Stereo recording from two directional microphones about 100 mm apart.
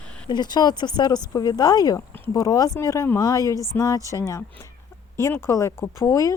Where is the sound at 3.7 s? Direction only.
20° left (ahead or behind).